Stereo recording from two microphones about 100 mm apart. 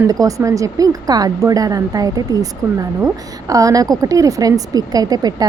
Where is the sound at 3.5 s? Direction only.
35° right (ahead or behind).